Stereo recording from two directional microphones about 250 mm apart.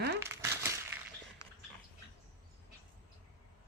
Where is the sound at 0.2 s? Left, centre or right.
Centre.